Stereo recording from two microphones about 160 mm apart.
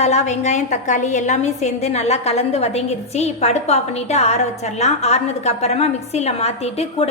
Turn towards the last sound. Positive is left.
turn(degrees=40)  # may be behind; listen again after turning